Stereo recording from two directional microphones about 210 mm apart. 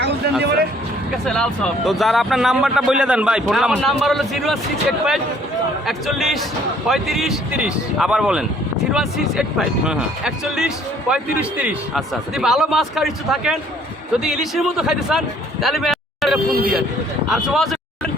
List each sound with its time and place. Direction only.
1.2 s a man's voice: 5° left (ahead or behind)